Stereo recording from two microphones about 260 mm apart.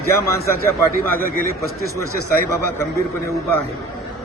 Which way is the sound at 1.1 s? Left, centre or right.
Right.